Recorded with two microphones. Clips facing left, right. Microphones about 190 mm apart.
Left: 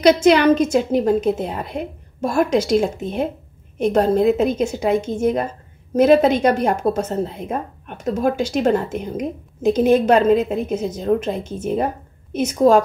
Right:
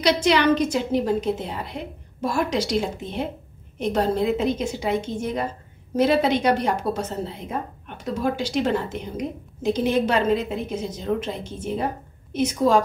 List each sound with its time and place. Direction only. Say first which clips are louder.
0.0 s a woman's voice: left 6 dB; 50° left (ahead or behind)